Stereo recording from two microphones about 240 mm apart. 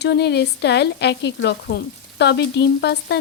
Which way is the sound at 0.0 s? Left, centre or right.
Left.